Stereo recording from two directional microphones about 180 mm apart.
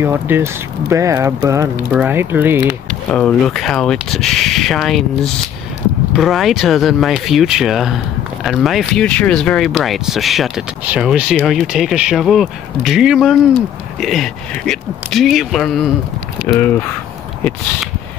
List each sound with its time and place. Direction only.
0.0 s speech: 10° right (ahead or behind)
2.9 s speech: 5° left (ahead or behind)